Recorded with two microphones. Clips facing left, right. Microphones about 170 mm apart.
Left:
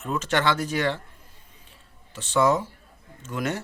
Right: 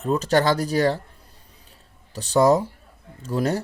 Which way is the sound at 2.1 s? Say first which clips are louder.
Right 4 dB; 40° right (ahead or behind).